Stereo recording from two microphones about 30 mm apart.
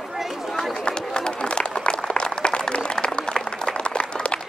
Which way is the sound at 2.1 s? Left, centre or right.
Left.